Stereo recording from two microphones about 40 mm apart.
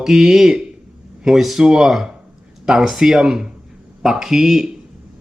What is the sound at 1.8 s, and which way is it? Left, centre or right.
Speech, centre.